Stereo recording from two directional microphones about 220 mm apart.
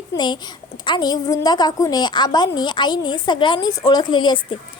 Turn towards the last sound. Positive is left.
turn(degrees=20)  # may be behind; listen again after turning